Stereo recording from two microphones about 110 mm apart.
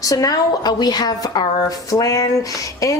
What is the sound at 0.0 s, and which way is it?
Speech, 30° left (ahead or behind).